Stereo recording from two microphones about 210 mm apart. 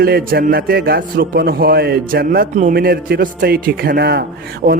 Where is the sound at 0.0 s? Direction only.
45° right (ahead or behind).